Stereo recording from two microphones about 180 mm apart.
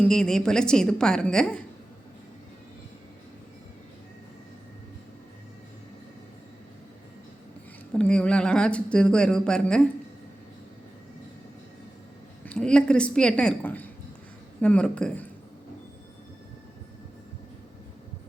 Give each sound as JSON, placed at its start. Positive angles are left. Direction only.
{"t": 0.0, "sound": "a woman's voice", "side_deg": 5}
{"t": 7.9, "sound": "a woman's voice", "side_deg": 5}
{"t": 12.5, "sound": "a woman's voice", "side_deg": 5}